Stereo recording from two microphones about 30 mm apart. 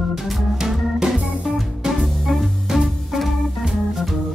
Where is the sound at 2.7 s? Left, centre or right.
Right.